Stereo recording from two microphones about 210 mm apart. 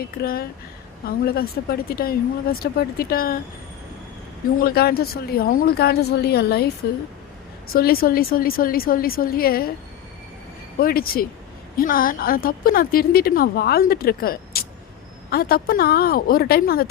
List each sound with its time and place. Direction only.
0.0 s a woman's voice: 45° left (ahead or behind)
4.6 s a woman's voice: 45° left (ahead or behind)
7.7 s a woman's voice: 45° left (ahead or behind)
10.8 s a woman's voice: 45° left (ahead or behind)